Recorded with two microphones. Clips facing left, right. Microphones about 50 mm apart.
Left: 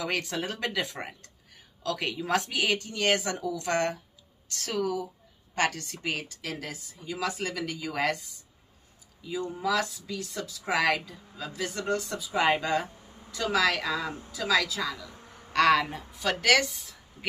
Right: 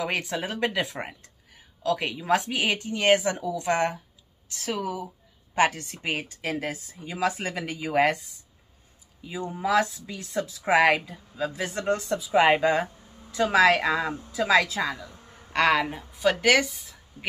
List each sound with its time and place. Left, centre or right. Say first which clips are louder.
0.0 s speech: right 2 dB; centre; by 15.0 s right
15.5 s a woman's voice: even; right; by 17.3 s centre